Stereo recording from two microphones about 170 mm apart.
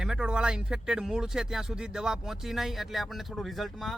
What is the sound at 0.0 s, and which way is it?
Speech, 5° right (ahead or behind).